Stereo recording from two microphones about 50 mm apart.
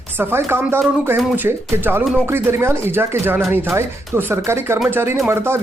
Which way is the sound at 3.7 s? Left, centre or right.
Right.